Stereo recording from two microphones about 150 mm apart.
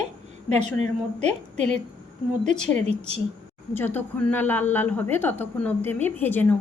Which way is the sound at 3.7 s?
15° left (ahead or behind).